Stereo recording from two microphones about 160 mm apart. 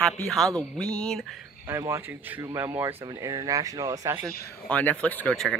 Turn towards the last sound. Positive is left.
turn(degrees=0)  # may be behind; listen again after turning